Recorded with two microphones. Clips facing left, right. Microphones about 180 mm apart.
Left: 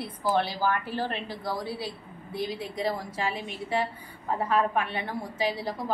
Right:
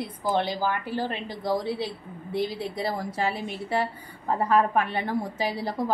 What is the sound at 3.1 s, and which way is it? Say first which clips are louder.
A woman's voice: right 3 dB; 40° right (ahead or behind).